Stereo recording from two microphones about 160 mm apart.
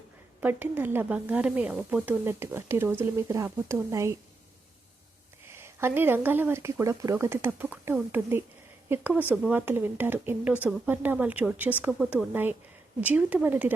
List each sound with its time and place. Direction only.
0.3 s speech: 10° right (ahead or behind)
5.5 s speech: 15° right (ahead or behind)